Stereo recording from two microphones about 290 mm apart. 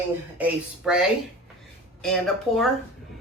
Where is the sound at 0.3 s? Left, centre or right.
Centre.